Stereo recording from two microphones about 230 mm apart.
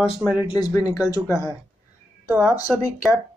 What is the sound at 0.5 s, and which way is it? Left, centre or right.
Speech, centre.